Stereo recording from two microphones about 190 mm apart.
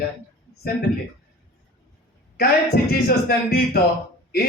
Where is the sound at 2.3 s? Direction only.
55° left (ahead or behind).